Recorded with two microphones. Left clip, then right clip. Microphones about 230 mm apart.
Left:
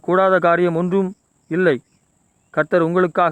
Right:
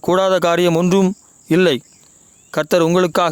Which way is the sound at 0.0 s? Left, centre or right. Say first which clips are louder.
Even; right.